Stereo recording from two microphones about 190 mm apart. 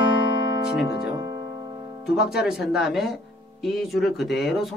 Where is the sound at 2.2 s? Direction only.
5° right (ahead or behind).